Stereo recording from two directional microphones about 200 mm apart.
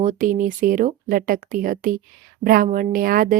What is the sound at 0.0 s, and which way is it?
Speech, 40° right (ahead or behind).